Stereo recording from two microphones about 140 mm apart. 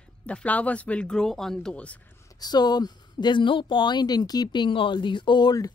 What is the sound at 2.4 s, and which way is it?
Speech, 30° left (ahead or behind).